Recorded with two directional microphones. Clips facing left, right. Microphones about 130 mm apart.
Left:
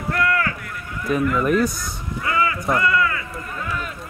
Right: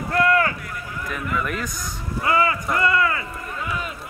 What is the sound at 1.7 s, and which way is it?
Speech, 15° right (ahead or behind).